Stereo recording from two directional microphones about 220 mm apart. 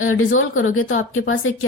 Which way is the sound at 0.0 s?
65° left (ahead or behind).